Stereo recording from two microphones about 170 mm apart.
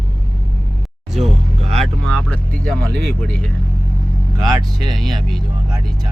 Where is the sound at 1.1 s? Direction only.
35° right (ahead or behind).